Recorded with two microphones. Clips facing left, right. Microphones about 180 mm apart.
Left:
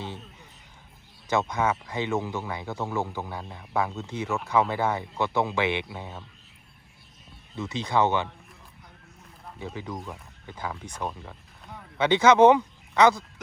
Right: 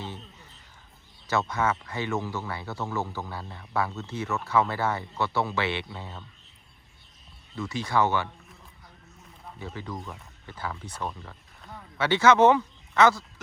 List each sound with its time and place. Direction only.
1.3 s speech: 15° left (ahead or behind)
7.5 s speech: 20° left (ahead or behind)
9.7 s speech: 15° left (ahead or behind)
11.0 s a sound: 5° left (ahead or behind)
11.9 s speech: 20° left (ahead or behind)